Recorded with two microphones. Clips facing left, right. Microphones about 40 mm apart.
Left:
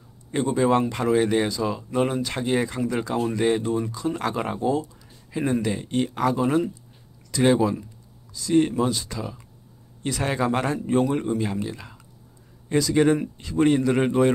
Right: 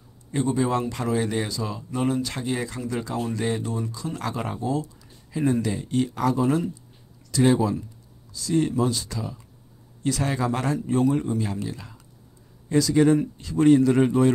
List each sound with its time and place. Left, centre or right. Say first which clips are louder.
0.7 s speech: left 5 dB; left
1.0 s speech: left 5 dB; left
2.0 s speech: left 1 dB; left
6.1 s speech: left 2 dB; left